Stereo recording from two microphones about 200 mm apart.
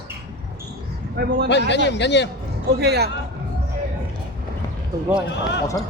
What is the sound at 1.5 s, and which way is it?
Speech, 60° left (ahead or behind).